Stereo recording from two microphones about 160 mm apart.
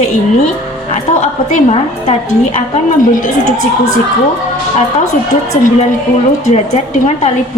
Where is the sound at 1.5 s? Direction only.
50° left (ahead or behind).